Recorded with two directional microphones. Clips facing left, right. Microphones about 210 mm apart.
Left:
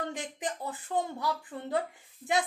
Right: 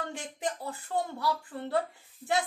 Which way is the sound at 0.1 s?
15° left (ahead or behind).